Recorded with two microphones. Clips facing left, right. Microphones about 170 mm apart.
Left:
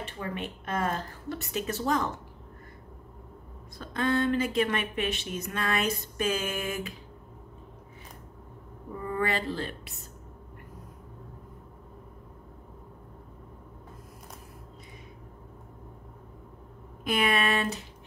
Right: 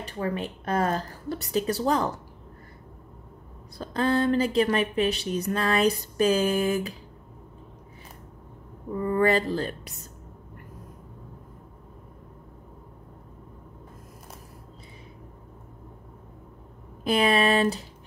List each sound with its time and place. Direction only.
0.0 s speech: 35° right (ahead or behind)
3.7 s speech: 35° right (ahead or behind)
9.1 s speech: 40° right (ahead or behind)
17.0 s speech: 30° right (ahead or behind)